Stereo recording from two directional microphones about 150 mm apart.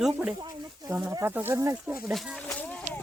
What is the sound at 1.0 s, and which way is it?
Speech, 25° right (ahead or behind).